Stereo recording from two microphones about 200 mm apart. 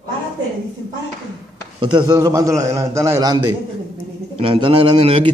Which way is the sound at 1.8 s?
20° right (ahead or behind).